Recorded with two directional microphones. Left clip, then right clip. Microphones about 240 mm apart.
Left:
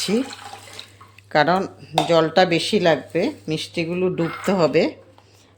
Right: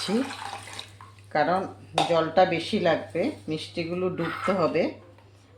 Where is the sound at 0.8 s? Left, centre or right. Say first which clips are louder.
Left 2 dB; centre.